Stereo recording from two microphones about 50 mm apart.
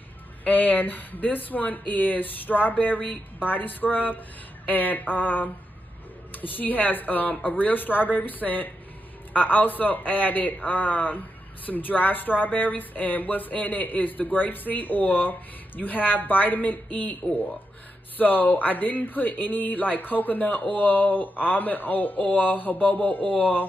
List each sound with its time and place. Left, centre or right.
0.4 s a man's voice: left